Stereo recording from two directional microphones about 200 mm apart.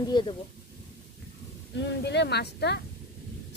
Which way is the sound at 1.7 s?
60° left (ahead or behind).